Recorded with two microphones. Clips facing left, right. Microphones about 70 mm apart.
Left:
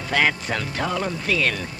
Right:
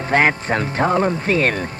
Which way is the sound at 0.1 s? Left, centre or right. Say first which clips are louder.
Right 5 dB; right.